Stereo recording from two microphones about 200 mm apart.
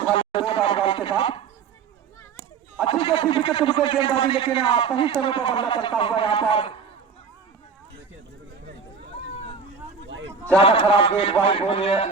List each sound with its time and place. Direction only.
0.0 s a sound: 25° left (ahead or behind)
2.8 s speech: 25° left (ahead or behind)
10.6 s speech: 30° left (ahead or behind)